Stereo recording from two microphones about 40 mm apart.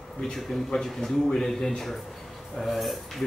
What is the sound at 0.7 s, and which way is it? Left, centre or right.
Speech, centre.